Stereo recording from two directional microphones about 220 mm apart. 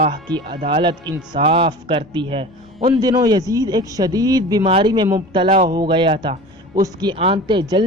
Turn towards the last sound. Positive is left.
turn(degrees=-20)  # may be behind; listen again after turning